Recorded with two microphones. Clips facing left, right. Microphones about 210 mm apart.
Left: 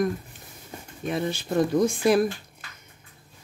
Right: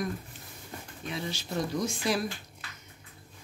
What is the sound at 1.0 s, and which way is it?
Speech, 55° left (ahead or behind).